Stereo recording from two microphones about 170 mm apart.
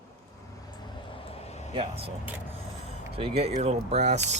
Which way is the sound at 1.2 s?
35° left (ahead or behind).